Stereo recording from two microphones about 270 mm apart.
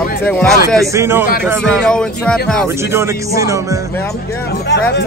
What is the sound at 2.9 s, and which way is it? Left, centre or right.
Speech, centre.